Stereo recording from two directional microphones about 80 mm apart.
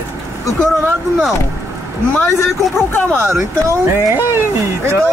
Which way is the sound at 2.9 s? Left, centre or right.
Left.